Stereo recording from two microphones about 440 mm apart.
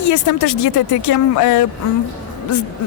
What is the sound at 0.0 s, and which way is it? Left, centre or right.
A woman's voice, left.